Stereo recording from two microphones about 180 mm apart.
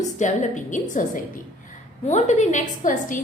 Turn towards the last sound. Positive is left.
turn(degrees=45)  # may be behind; listen again after turning